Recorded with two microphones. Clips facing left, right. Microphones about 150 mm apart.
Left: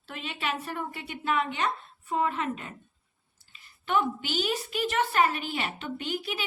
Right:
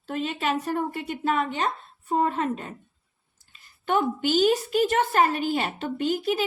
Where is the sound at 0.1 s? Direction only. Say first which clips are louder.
Right 7 dB; 40° right (ahead or behind).